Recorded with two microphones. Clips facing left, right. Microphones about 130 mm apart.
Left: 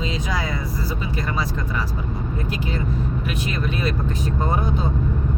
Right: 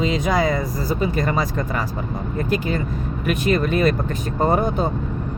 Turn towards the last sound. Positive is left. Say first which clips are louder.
# right 5 dB
turn(degrees=-50)  # may be behind; listen again after turning